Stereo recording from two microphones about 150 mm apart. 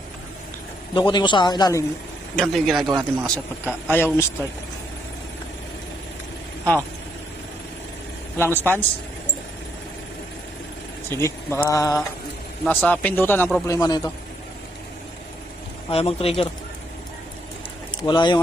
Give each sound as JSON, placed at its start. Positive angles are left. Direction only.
{"t": 0.9, "sound": "a man's voice", "side_deg": 35}
{"t": 2.3, "sound": "a man's voice", "side_deg": 5}
{"t": 2.8, "sound": "speech", "side_deg": -25}
{"t": 3.2, "sound": "speech", "side_deg": 10}
{"t": 8.4, "sound": "speech", "side_deg": 15}
{"t": 11.1, "sound": "speech", "side_deg": 20}
{"t": 12.6, "sound": "speech", "side_deg": 10}
{"t": 13.7, "sound": "speech", "side_deg": 25}
{"t": 15.9, "sound": "a man's voice", "side_deg": 40}
{"t": 18.0, "sound": "a man's voice", "side_deg": 30}